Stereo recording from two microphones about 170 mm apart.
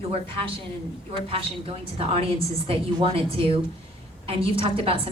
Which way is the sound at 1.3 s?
35° right (ahead or behind).